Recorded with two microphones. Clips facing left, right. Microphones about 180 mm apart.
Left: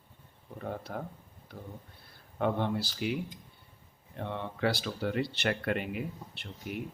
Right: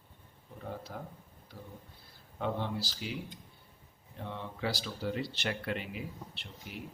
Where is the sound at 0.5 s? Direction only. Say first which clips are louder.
Left 4 dB; 60° left (ahead or behind).